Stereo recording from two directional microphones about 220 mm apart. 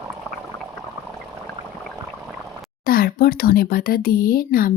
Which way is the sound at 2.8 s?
40° left (ahead or behind).